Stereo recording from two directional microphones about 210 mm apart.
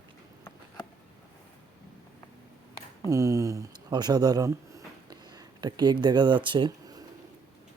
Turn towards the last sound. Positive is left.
turn(degrees=-20)  # may be behind; listen again after turning